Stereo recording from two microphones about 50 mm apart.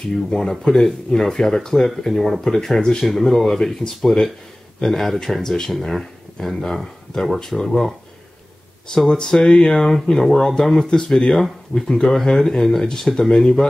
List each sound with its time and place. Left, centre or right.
0.3 s speech: centre
8.9 s speech: centre